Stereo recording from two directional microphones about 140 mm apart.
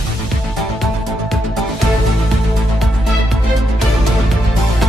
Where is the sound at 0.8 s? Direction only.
Centre (ahead or behind).